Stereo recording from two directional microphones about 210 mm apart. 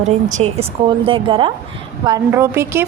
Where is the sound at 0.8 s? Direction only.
25° right (ahead or behind).